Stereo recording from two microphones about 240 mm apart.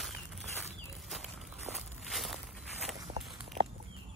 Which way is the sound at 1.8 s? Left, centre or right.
Centre.